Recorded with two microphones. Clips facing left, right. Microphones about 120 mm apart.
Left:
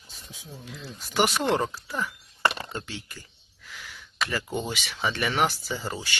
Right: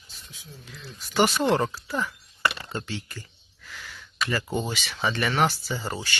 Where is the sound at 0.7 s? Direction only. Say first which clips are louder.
Even; 15° left (ahead or behind).